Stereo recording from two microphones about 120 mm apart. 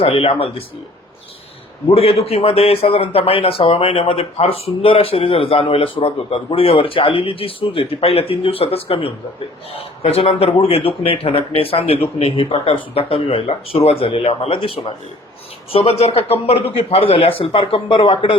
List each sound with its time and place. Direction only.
0.0 s speech: 50° left (ahead or behind)
1.9 s speech: 55° left (ahead or behind)